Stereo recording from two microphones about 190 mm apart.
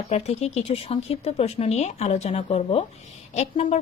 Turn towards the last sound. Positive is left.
turn(degrees=35)  # may be behind; listen again after turning